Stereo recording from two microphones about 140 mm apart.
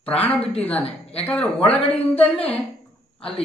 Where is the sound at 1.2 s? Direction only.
10° left (ahead or behind).